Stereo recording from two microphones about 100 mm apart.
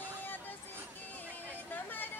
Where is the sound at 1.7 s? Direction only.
20° left (ahead or behind).